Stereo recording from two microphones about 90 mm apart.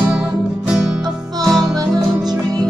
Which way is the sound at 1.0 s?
45° right (ahead or behind).